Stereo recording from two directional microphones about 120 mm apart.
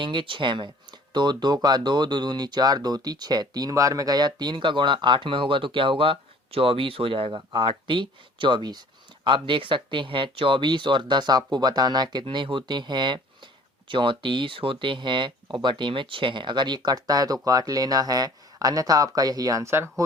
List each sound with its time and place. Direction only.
0.0 s speech: 45° right (ahead or behind); by 20.1 s 20° right (ahead or behind)